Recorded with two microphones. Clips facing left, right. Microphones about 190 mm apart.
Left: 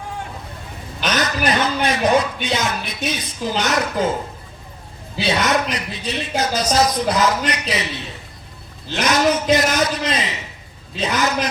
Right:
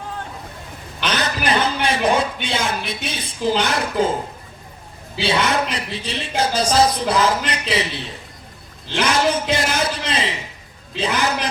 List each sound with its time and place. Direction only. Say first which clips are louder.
1.0 s speech: left 2 dB; 30° right (ahead or behind)
5.2 s speech: left 1 dB; 30° right (ahead or behind)
9.0 s a man's voice: left 1 dB; 30° right (ahead or behind)